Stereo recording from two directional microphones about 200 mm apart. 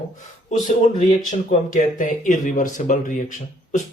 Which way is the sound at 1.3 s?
40° left (ahead or behind).